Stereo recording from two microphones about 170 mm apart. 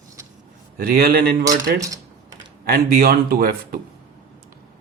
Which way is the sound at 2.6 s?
65° right (ahead or behind).